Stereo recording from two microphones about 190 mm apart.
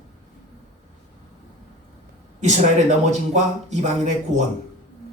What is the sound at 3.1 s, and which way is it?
Speech, 35° right (ahead or behind).